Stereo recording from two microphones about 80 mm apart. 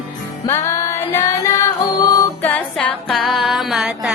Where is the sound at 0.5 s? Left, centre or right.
Left.